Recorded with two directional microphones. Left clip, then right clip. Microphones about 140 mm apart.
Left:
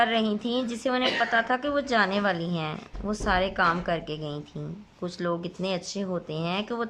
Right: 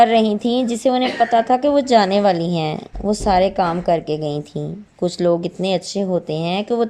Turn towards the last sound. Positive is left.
turn(degrees=-25)  # may be behind; listen again after turning